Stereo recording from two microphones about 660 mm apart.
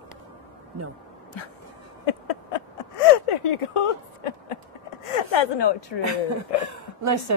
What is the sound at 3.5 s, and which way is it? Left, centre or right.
Speech, left.